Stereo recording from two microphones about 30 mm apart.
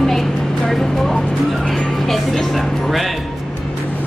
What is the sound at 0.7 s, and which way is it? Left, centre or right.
Vehicle, centre.